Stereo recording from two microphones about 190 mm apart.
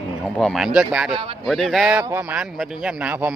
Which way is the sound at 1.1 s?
30° right (ahead or behind).